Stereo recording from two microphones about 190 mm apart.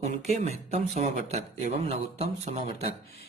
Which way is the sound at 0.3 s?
35° right (ahead or behind).